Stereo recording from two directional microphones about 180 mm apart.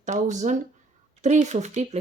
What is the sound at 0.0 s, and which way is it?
Speech, 40° right (ahead or behind).